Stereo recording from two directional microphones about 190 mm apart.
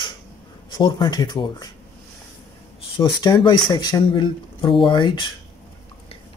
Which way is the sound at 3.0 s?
25° left (ahead or behind).